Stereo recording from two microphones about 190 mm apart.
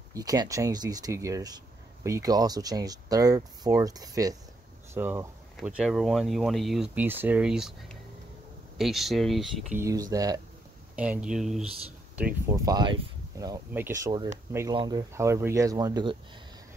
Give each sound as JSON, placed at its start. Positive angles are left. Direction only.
{"t": 0.1, "sound": "speech", "side_deg": -20}
{"t": 9.8, "sound": "speech", "side_deg": -20}
{"t": 11.0, "sound": "speech", "side_deg": -5}
{"t": 13.7, "sound": "speech", "side_deg": -10}